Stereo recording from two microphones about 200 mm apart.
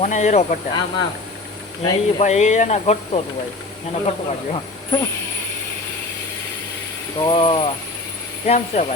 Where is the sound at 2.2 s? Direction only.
35° left (ahead or behind).